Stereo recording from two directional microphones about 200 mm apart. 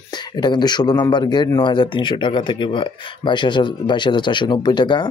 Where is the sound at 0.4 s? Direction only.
20° left (ahead or behind).